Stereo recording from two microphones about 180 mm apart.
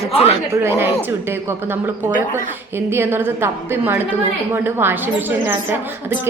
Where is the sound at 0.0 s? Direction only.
35° left (ahead or behind).